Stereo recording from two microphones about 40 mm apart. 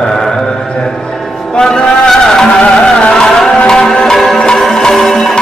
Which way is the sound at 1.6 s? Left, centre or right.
Centre.